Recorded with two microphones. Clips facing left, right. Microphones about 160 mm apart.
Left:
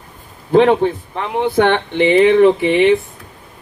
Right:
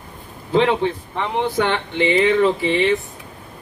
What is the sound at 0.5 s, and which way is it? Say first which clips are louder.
Speech: left 6 dB; 50° left (ahead or behind).